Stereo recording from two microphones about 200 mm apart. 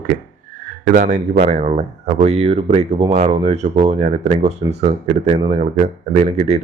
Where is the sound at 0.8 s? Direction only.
40° right (ahead or behind).